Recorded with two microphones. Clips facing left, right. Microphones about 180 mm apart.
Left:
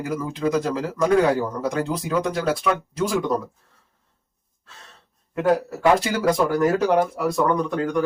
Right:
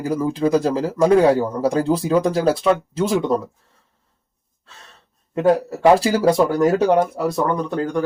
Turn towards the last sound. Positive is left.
turn(degrees=-30)  # may be behind; listen again after turning